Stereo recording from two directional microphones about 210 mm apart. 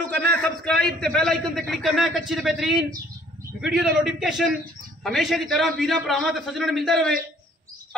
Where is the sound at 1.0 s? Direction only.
5° left (ahead or behind).